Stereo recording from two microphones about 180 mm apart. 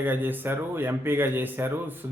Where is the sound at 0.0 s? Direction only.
10° right (ahead or behind).